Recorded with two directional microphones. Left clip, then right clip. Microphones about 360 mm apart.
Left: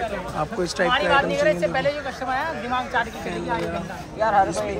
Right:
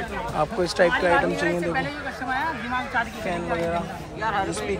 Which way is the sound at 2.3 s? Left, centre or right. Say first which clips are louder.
Left 1 dB; left.